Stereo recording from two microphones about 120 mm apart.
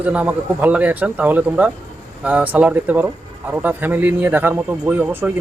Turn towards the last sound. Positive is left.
turn(degrees=-15)  # may be behind; listen again after turning